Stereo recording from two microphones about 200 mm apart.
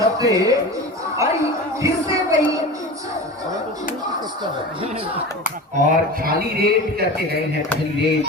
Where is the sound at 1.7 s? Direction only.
15° right (ahead or behind).